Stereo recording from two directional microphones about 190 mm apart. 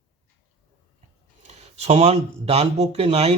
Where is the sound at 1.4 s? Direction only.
35° right (ahead or behind).